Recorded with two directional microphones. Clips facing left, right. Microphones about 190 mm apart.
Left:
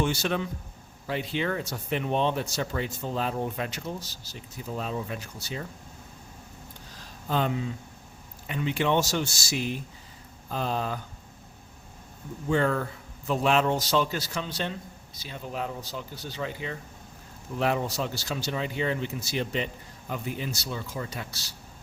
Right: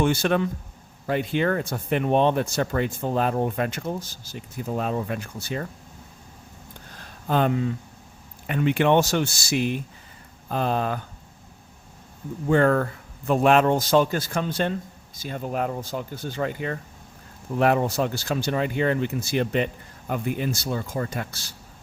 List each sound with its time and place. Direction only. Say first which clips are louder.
0.0 s a man's voice: right 6 dB; 55° right (ahead or behind)
6.9 s a sound: right 5 dB; 55° right (ahead or behind)
8.4 s speech: right 6 dB; 60° right (ahead or behind)
12.5 s a man's voice: right 6 dB; 55° right (ahead or behind)